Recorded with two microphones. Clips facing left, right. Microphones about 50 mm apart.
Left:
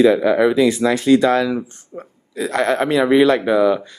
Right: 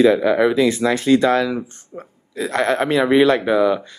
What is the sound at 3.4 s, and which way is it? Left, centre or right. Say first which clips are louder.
Speech: left 1 dB; left.